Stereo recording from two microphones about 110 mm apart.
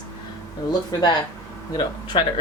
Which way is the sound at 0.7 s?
35° left (ahead or behind).